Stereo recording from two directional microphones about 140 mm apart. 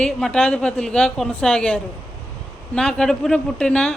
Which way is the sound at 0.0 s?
5° left (ahead or behind).